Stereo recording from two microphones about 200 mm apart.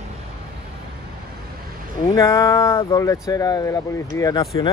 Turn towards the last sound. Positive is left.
turn(degrees=20)  # may be behind; listen again after turning